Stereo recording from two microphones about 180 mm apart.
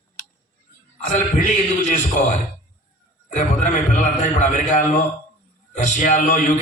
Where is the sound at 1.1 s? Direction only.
45° left (ahead or behind).